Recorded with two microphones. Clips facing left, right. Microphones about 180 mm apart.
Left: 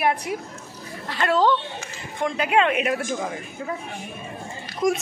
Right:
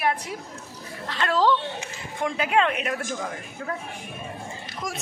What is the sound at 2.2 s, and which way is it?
A man's voice, centre (ahead or behind).